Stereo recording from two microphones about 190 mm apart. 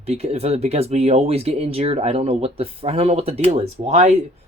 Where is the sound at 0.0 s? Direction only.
35° right (ahead or behind).